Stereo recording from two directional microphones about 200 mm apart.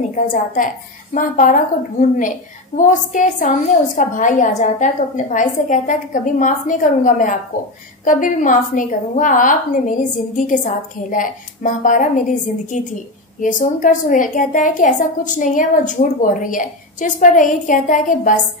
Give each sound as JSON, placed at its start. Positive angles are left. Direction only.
{"t": 0.1, "sound": "a woman's voice", "side_deg": 40}